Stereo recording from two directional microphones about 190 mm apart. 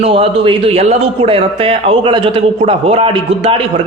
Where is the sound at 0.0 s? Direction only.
30° right (ahead or behind).